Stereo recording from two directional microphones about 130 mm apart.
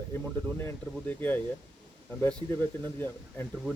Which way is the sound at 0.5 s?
15° left (ahead or behind).